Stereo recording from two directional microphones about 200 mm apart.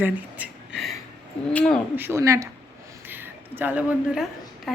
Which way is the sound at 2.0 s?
15° right (ahead or behind).